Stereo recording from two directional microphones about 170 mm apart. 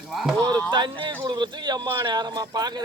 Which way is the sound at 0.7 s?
25° right (ahead or behind).